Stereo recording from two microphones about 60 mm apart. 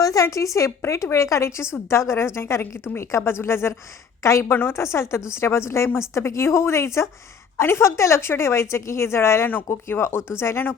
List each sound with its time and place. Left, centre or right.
0.0 s a woman's voice: left
4.5 s a woman's voice: left
4.8 s speech: left